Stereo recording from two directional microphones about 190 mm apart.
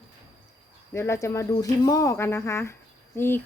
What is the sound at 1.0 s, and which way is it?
Speech, 15° left (ahead or behind).